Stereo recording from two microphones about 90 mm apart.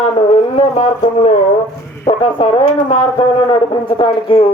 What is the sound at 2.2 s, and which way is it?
Speech, 90° left.